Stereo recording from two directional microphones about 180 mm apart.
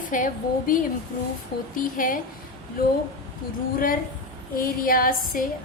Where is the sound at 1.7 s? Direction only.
50° left (ahead or behind).